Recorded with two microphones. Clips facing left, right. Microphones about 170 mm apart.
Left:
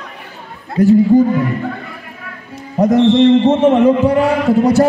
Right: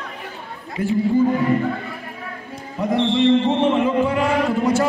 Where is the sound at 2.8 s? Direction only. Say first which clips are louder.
Left 9 dB; 45° left (ahead or behind).